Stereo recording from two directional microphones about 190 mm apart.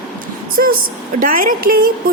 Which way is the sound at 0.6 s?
55° right (ahead or behind).